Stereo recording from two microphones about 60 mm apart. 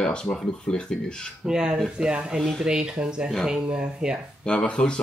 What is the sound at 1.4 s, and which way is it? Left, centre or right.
Speech, centre.